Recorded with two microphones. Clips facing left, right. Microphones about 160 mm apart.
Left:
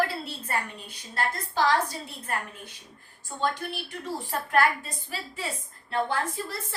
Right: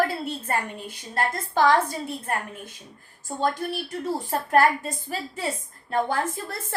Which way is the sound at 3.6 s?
40° right (ahead or behind).